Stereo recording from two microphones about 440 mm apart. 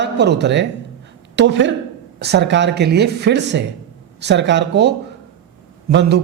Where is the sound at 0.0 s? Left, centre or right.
Right.